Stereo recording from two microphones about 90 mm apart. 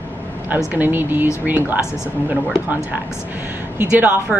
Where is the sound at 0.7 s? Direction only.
20° right (ahead or behind).